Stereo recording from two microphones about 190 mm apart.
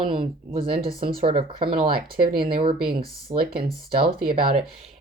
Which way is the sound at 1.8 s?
50° right (ahead or behind).